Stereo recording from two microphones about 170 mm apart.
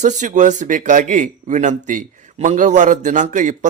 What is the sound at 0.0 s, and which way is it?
Speech, 45° right (ahead or behind).